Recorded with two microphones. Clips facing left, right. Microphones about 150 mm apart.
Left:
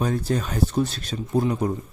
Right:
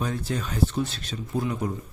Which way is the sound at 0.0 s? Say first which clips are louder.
Left 5 dB; 40° left (ahead or behind).